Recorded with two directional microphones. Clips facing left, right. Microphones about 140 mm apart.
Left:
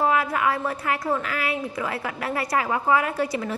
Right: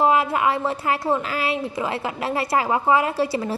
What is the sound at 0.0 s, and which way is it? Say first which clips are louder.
A woman's voice: right 3 dB; 25° right (ahead or behind).